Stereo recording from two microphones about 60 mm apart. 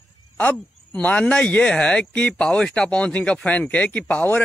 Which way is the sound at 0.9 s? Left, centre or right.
Left.